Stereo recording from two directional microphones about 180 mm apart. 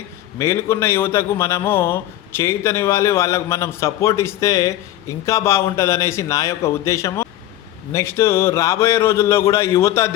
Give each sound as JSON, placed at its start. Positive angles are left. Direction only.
{"t": 0.3, "sound": "a man's voice", "side_deg": 15}